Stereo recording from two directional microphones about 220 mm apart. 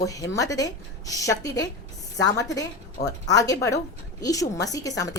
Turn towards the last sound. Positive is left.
turn(degrees=15)  # may be behind; listen again after turning